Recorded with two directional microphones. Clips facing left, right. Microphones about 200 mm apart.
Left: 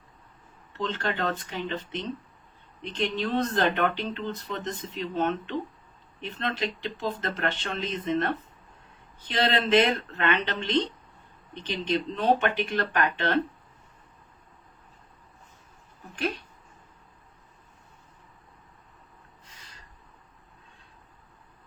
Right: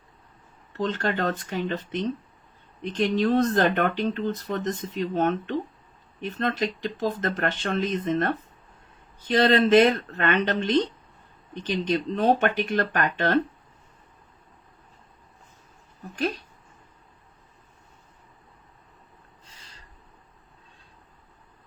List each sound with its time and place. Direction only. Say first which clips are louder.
0.8 s speech: right 4 dB; 45° right (ahead or behind)